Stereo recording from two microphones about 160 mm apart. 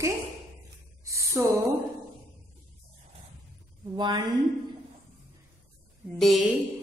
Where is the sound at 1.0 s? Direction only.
20° right (ahead or behind).